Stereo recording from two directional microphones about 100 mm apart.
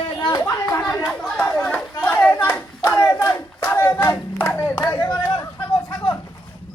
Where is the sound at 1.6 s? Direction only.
15° left (ahead or behind).